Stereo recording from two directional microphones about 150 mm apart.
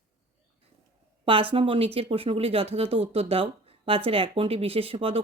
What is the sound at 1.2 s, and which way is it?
Speech, 35° right (ahead or behind).